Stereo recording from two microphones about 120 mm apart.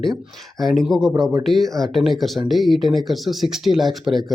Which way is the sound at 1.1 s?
30° right (ahead or behind).